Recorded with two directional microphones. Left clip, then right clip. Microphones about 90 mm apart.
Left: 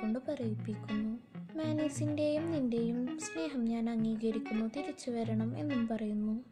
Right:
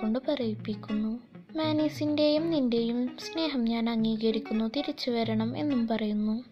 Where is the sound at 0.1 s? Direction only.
20° right (ahead or behind).